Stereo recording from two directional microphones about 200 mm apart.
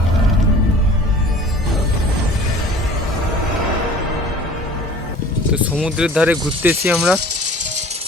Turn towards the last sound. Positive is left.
turn(degrees=-5)  # may be behind; listen again after turning